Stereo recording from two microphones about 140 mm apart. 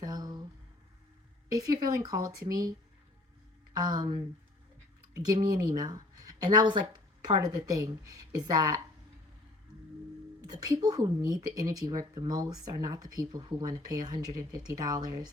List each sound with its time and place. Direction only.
0.0 s a sound: 30° right (ahead or behind)
1.5 s speech: 25° right (ahead or behind)
3.8 s speech: 30° right (ahead or behind)
10.4 s speech: 30° right (ahead or behind)